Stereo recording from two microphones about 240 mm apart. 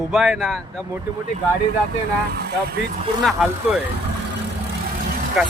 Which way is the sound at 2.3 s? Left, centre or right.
Right.